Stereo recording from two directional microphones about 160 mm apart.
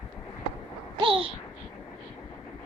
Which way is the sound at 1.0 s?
35° right (ahead or behind).